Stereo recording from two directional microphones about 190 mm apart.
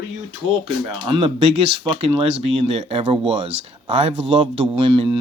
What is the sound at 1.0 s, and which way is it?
Speech, 25° right (ahead or behind).